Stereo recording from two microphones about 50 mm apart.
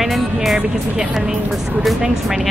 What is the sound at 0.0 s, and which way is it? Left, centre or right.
Music, centre.